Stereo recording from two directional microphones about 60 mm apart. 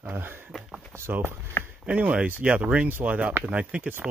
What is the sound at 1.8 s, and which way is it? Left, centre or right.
Speech, right.